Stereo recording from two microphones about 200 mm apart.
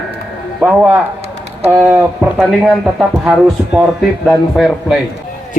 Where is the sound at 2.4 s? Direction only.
Centre (ahead or behind).